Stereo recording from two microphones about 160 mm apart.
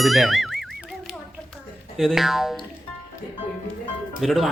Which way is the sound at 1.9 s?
Centre (ahead or behind).